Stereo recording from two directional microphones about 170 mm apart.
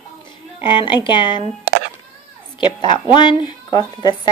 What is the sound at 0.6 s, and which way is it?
Speech, 30° left (ahead or behind).